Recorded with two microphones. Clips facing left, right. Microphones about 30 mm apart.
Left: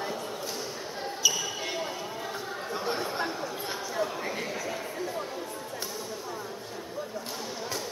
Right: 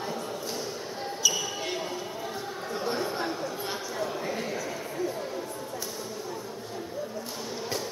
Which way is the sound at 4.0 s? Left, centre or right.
Centre.